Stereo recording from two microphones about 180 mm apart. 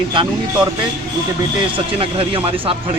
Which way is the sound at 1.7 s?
30° right (ahead or behind).